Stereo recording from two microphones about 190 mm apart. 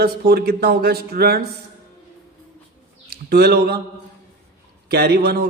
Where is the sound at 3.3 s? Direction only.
55° right (ahead or behind).